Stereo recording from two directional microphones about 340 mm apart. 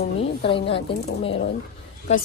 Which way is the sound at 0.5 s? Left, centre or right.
Centre.